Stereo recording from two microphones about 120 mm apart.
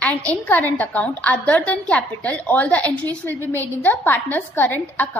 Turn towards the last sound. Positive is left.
turn(degrees=15)  # may be behind; listen again after turning